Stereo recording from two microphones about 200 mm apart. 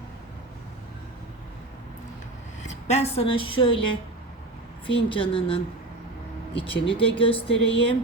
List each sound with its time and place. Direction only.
2.6 s a woman's voice: 35° left (ahead or behind)
4.9 s speech: 25° left (ahead or behind)